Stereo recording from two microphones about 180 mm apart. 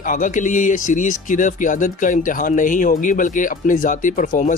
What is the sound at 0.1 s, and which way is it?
Speech, 45° left (ahead or behind).